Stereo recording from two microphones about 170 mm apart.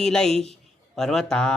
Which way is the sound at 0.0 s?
5° left (ahead or behind).